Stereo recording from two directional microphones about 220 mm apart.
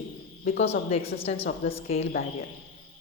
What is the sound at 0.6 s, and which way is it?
A woman's voice, 30° left (ahead or behind).